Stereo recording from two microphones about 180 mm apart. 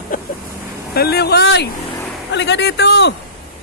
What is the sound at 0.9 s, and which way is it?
Speech, 60° left (ahead or behind).